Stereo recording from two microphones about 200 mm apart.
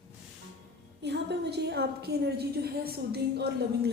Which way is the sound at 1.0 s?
55° right (ahead or behind).